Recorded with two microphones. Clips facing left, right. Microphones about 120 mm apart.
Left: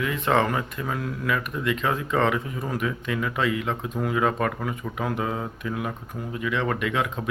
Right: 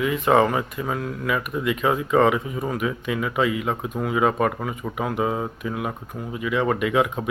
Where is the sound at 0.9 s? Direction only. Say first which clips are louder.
Right 2 dB; centre (ahead or behind).